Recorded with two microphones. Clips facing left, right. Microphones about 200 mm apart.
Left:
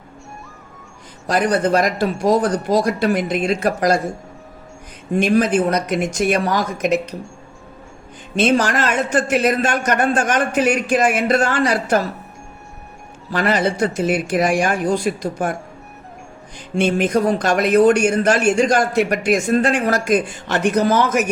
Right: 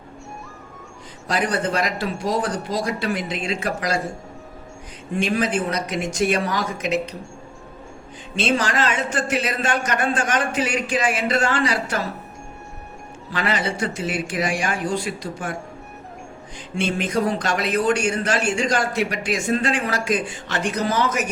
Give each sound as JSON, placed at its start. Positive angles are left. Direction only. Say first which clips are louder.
{"t": 1.3, "sound": "speech", "louder": "left 6 dB", "side_deg": 45}
{"t": 5.1, "sound": "speech", "louder": "left 6 dB", "side_deg": 50}
{"t": 8.4, "sound": "speech", "louder": "left 5 dB", "side_deg": 50}
{"t": 13.3, "sound": "speech", "louder": "left 6 dB", "side_deg": 45}
{"t": 16.6, "sound": "speech", "louder": "left 7 dB", "side_deg": 55}